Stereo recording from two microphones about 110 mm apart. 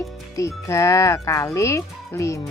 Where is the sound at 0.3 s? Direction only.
25° left (ahead or behind).